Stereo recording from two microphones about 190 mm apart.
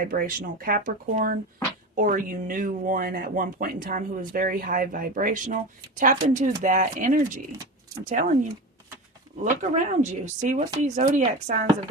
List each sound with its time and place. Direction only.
0.0 s speech: 50° right (ahead or behind)
9.4 s speech: 40° right (ahead or behind)